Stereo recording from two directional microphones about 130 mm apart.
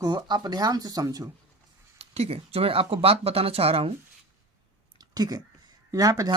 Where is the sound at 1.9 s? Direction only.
50° right (ahead or behind).